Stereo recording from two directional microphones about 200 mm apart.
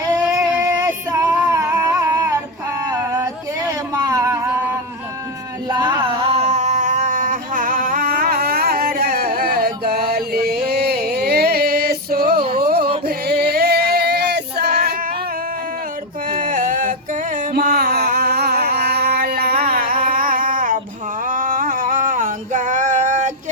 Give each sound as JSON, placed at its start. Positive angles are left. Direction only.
{"t": 0.0, "sound": "child singing", "side_deg": -15}
{"t": 0.6, "sound": "female singing", "side_deg": -15}
{"t": 1.5, "sound": "a sound", "side_deg": -15}
{"t": 12.5, "sound": "music", "side_deg": -50}
{"t": 13.1, "sound": "male singing", "side_deg": -50}
{"t": 16.3, "sound": "a sound", "side_deg": -45}